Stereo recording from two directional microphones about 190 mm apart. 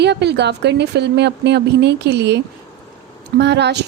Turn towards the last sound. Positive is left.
turn(degrees=-65)  # may be behind; listen again after turning